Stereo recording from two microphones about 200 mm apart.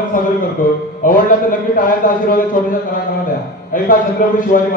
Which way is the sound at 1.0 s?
45° left (ahead or behind).